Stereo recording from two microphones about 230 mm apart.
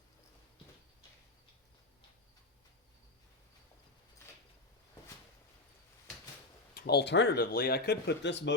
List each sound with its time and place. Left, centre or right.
6.7 s speech: left